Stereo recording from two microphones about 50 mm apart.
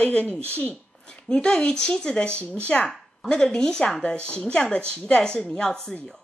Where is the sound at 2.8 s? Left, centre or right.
Centre.